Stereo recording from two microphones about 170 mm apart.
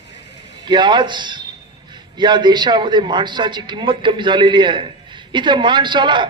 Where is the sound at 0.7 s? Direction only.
25° right (ahead or behind).